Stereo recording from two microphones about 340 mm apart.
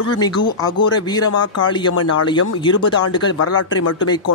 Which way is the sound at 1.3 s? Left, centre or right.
Left.